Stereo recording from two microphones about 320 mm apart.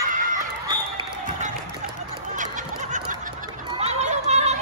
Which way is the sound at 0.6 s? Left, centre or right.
Centre.